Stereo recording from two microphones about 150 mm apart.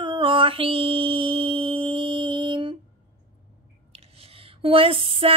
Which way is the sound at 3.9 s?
40° right (ahead or behind).